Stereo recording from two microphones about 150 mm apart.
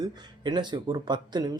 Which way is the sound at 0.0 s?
30° right (ahead or behind).